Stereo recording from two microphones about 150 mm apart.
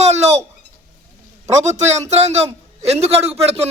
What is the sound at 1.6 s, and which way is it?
A man's voice, 50° right (ahead or behind).